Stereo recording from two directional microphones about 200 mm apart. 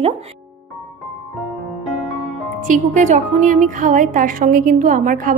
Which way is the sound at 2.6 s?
40° right (ahead or behind).